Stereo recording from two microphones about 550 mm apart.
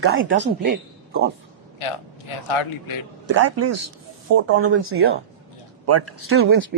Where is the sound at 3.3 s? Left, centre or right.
Right.